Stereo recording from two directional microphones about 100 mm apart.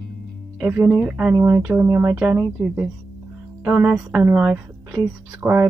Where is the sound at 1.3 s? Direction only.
30° right (ahead or behind).